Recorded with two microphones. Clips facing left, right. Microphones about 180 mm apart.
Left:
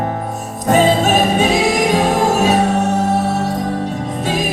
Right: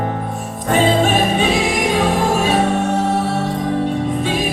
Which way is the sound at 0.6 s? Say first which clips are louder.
Left 2 dB; 40° left (ahead or behind).